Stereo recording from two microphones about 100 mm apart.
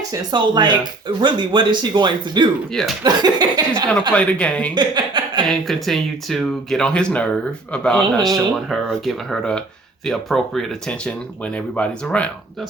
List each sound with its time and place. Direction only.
0.1 s speech: 45° right (ahead or behind)
4.1 s speech: 10° left (ahead or behind)
4.7 s speech: 50° right (ahead or behind)
5.5 s speech: centre (ahead or behind)